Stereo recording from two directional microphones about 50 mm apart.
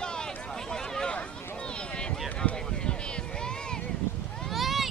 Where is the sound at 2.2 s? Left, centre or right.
Left.